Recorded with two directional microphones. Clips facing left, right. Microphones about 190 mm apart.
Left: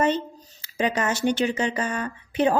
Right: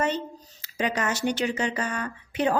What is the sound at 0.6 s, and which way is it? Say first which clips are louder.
Speech: left 3 dB; 25° left (ahead or behind).